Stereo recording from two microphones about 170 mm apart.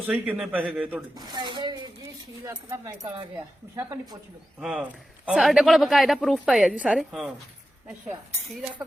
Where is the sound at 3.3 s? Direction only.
20° right (ahead or behind).